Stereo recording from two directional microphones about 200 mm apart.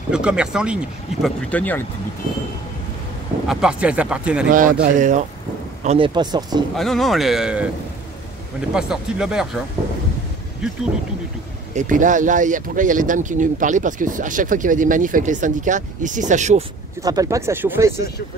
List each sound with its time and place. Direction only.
0.1 s speech: 5° right (ahead or behind)
1.5 s speech: 10° left (ahead or behind)
3.4 s speech: 5° right (ahead or behind)
4.5 s speech: 40° right (ahead or behind)
5.9 s speech: 25° right (ahead or behind)
6.7 s speech: centre (ahead or behind)
11.7 s speech: 40° right (ahead or behind)
17.0 s speech: 15° right (ahead or behind)